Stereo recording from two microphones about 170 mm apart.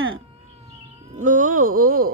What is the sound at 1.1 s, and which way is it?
Speech, 50° right (ahead or behind).